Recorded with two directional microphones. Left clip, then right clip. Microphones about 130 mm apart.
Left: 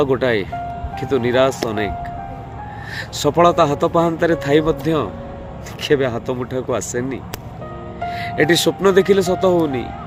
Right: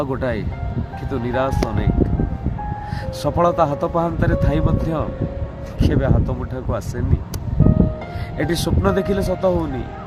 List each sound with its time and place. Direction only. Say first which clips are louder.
0.0 s a man's voice: left 6 dB; 20° right (ahead or behind)
3.2 s a man's voice: left 4 dB; 15° right (ahead or behind)
8.4 s a man's voice: left 7 dB; 20° right (ahead or behind)